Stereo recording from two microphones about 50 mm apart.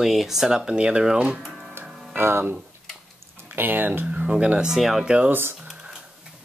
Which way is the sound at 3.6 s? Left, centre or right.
Right.